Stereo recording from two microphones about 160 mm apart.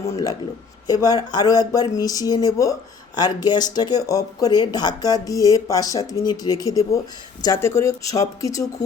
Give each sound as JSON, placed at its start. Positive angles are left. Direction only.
{"t": 0.0, "sound": "speech", "side_deg": 20}